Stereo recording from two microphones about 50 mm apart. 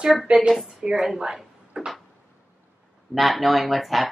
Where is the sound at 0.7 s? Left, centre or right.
Centre.